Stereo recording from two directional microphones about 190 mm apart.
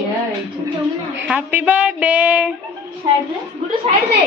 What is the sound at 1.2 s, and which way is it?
A woman's voice, 5° right (ahead or behind).